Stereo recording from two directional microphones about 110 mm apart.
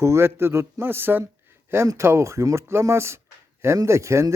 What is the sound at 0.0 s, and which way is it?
Speech, 25° right (ahead or behind).